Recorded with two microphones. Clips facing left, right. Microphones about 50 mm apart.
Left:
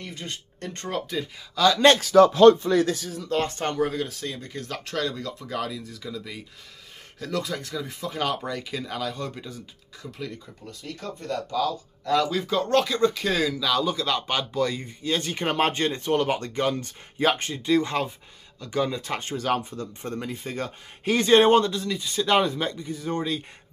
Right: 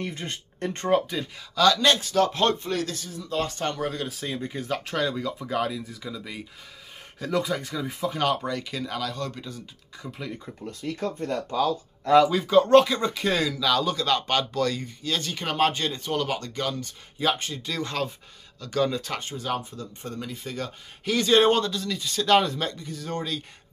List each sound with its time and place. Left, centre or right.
0.0 s speech: right
1.1 s speech: centre
3.3 s speech: left
3.5 s a man's voice: left
3.8 s speech: centre
4.2 s speech: centre
10.0 s speech: centre
10.4 s speech: right
12.3 s speech: centre
14.9 s a man's voice: left
16.7 s a man's voice: left
19.2 s a man's voice: left